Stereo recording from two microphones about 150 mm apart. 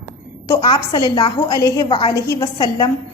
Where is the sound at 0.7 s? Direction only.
30° left (ahead or behind).